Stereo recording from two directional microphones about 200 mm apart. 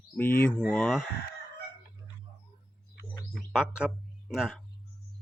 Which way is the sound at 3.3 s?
Centre (ahead or behind).